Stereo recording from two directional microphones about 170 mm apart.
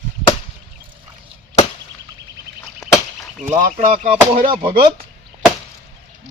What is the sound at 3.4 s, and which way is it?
Speech, 45° right (ahead or behind).